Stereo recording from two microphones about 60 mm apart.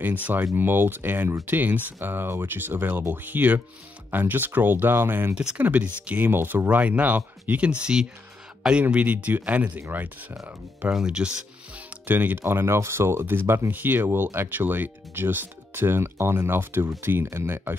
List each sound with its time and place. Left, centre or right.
0.0 s speech: right
5.3 s speech: centre
5.6 s speech: right
7.8 s speech: centre
8.9 s speech: right
10.9 s music: centre
12.2 s speech: right
13.7 s speech: right